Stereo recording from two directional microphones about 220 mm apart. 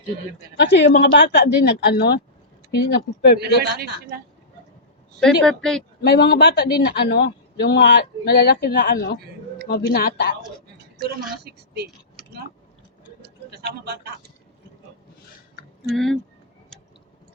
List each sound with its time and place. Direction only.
0.5 s a man's voice: 45° left (ahead or behind)
3.3 s a man's voice: 45° right (ahead or behind)
5.2 s speech: centre (ahead or behind)
6.0 s a man's voice: 50° left (ahead or behind)
11.4 s speech: 45° right (ahead or behind)
13.2 s a sound: 45° right (ahead or behind)
15.9 s speech: centre (ahead or behind)